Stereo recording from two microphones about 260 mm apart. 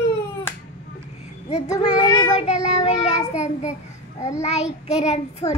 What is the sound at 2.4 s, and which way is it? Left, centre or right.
A child's voice, left.